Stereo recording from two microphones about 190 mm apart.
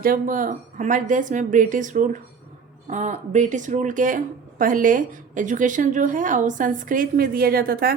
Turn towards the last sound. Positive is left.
turn(degrees=-50)  # may be behind; listen again after turning